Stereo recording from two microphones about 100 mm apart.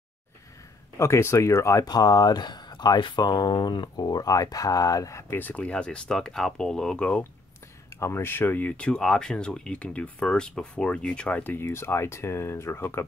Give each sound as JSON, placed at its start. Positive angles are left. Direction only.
{"t": 0.9, "sound": "speech", "side_deg": 30}
{"t": 5.4, "sound": "speech", "side_deg": 15}
{"t": 8.0, "sound": "speech", "side_deg": 25}
{"t": 11.5, "sound": "speech", "side_deg": 25}